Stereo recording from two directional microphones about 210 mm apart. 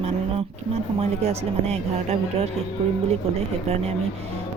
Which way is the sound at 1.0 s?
30° right (ahead or behind).